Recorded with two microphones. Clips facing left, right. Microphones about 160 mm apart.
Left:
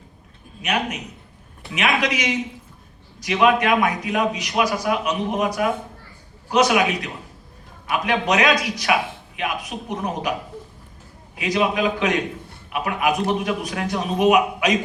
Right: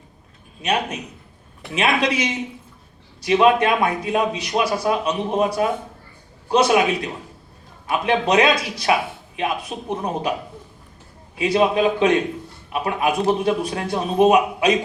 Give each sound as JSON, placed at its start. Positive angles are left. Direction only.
{"t": 0.6, "sound": "a man's voice", "side_deg": -30}
{"t": 11.3, "sound": "a man's voice", "side_deg": -30}